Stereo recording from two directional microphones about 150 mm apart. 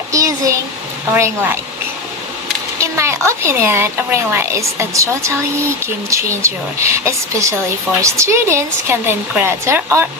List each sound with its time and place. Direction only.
0.1 s a child's voice: 20° right (ahead or behind)
2.8 s speech: 20° right (ahead or behind)